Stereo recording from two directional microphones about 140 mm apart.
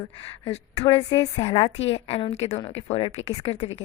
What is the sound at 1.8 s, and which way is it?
A woman's voice, 45° left (ahead or behind).